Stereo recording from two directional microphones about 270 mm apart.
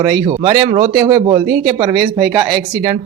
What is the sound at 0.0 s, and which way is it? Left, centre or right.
Speech, centre.